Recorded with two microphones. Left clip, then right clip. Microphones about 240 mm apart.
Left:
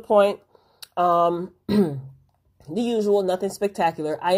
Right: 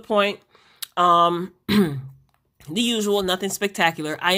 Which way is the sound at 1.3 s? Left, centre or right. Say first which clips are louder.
Right 1 dB; right.